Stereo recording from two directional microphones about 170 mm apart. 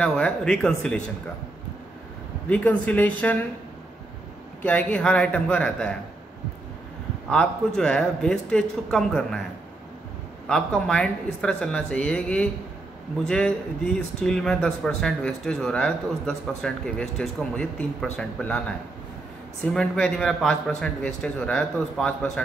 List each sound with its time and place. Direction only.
0.0 s speech: 5° left (ahead or behind)
2.5 s a man's voice: 5° left (ahead or behind)
4.6 s a man's voice: 10° left (ahead or behind)
7.2 s speech: 5° left (ahead or behind)
10.5 s speech: 5° left (ahead or behind)
19.6 s speech: 5° left (ahead or behind)